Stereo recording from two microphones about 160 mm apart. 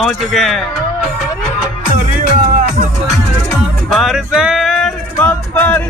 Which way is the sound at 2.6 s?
45° right (ahead or behind).